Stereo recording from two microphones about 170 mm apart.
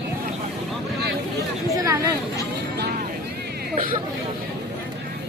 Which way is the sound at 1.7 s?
20° right (ahead or behind).